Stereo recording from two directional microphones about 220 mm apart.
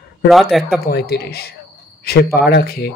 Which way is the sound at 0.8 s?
45° left (ahead or behind).